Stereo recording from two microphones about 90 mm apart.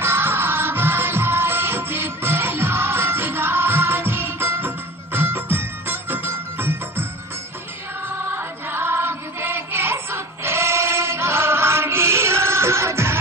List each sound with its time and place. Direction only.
0.0 s music: 25° right (ahead or behind)
8.3 s music: 25° right (ahead or behind)